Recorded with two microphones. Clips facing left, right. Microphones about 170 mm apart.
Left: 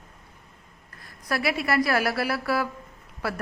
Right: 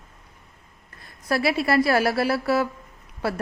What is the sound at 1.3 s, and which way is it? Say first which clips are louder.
Speech: right 4 dB; 30° right (ahead or behind).